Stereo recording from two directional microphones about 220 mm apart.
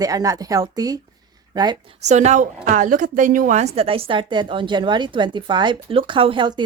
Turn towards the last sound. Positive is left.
turn(degrees=-20)  # may be behind; listen again after turning